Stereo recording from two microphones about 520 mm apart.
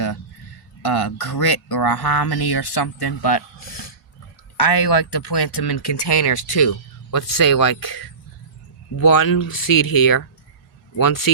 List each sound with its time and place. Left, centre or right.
0.9 s speech: left